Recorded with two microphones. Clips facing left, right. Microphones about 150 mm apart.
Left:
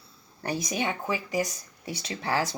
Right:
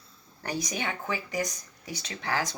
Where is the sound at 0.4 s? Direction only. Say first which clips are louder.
Left 3 dB; 30° left (ahead or behind).